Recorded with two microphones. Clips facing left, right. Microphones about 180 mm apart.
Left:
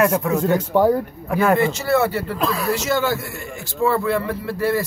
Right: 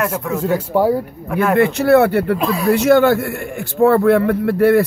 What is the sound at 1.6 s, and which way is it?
Speech, 60° right (ahead or behind).